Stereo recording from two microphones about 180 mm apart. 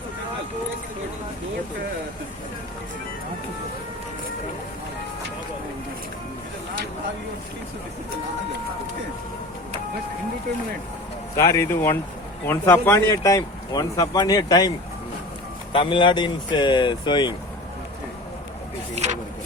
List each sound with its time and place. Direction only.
11.3 s speech: 15° left (ahead or behind)
15.7 s speech: 30° left (ahead or behind)